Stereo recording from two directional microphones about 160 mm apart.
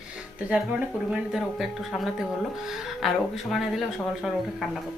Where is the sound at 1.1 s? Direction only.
Centre (ahead or behind).